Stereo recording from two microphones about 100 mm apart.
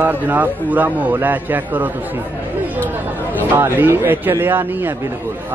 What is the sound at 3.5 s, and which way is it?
A man's voice, 20° right (ahead or behind).